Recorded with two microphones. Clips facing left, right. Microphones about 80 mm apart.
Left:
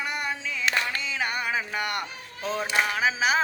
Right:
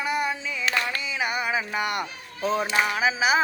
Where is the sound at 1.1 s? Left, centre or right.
Centre.